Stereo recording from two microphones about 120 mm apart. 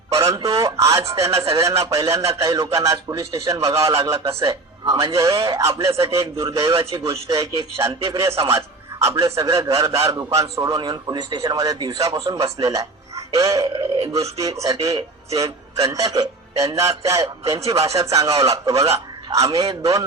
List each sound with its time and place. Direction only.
0.1 s a man's voice: 25° right (ahead or behind)
6.7 s a man's voice: 50° right (ahead or behind)
7.1 s a man's voice: 30° right (ahead or behind)